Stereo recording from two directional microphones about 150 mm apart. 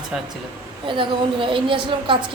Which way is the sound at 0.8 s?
35° right (ahead or behind).